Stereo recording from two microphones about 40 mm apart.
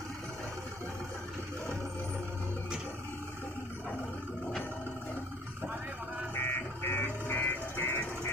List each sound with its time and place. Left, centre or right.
6.3 s vehicle: left